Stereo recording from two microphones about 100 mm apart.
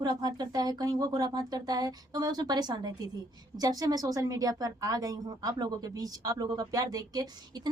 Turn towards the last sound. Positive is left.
turn(degrees=-40)  # may be behind; listen again after turning